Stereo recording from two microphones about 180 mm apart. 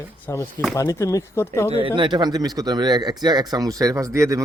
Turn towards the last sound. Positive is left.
turn(degrees=-15)  # may be behind; listen again after turning